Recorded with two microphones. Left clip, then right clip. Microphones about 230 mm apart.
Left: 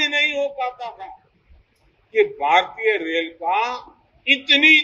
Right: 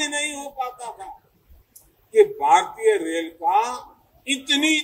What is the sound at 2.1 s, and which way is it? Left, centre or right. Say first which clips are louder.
A man's voice: right 1 dB; right.